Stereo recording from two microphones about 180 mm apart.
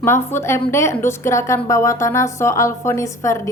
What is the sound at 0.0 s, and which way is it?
A woman's voice, 15° left (ahead or behind).